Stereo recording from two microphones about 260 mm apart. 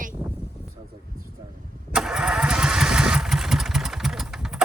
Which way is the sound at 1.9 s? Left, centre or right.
Centre.